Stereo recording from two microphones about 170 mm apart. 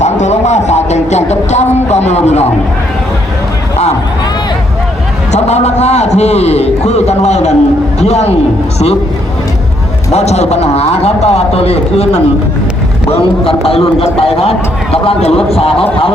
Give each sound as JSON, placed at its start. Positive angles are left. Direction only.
{"t": 0.0, "sound": "speech", "side_deg": 40}
{"t": 5.3, "sound": "a man's voice", "side_deg": 40}
{"t": 10.1, "sound": "speech", "side_deg": 40}